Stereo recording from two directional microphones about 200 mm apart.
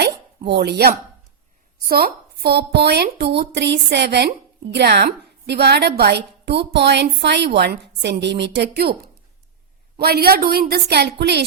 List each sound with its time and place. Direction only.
0.0 s a sound: 55° right (ahead or behind)
1.8 s a woman's voice: 45° right (ahead or behind)
10.0 s a woman's voice: 50° right (ahead or behind)